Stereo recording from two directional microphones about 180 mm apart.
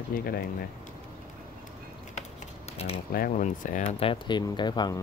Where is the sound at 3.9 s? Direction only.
30° left (ahead or behind).